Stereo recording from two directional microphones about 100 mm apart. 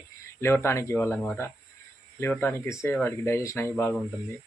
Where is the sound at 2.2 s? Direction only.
25° left (ahead or behind).